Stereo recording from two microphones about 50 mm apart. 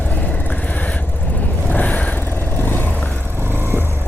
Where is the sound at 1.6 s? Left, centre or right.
Left.